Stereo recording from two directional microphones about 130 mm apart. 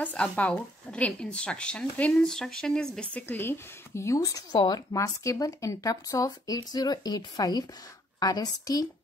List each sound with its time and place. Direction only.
0.0 s speech: 10° left (ahead or behind); by 8.8 s 30° left (ahead or behind)